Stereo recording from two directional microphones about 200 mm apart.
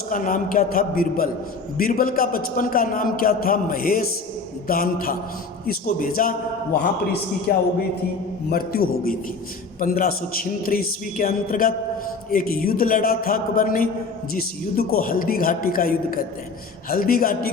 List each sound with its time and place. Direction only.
0.1 s a man's voice: 40° left (ahead or behind)
7.5 s a man's voice: 50° left (ahead or behind)